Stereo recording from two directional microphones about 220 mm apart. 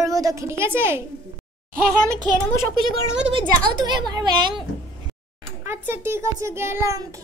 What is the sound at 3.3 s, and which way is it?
A woman's voice, 20° right (ahead or behind).